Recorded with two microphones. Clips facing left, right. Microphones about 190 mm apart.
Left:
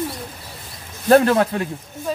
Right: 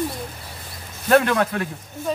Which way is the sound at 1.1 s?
35° left (ahead or behind).